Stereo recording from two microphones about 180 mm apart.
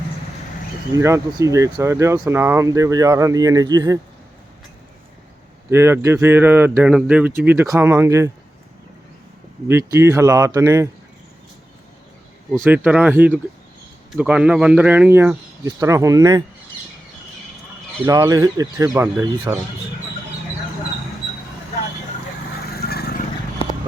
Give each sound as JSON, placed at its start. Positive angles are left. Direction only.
{"t": 0.9, "sound": "speech", "side_deg": -15}
{"t": 5.7, "sound": "speech", "side_deg": -15}
{"t": 9.6, "sound": "speech", "side_deg": -15}
{"t": 12.5, "sound": "speech", "side_deg": -10}
{"t": 18.0, "sound": "speech", "side_deg": -20}
{"t": 22.7, "sound": "vehicle", "side_deg": 60}